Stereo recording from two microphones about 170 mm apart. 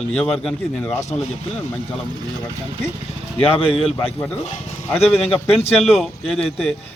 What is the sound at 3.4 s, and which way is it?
Speech, 35° left (ahead or behind).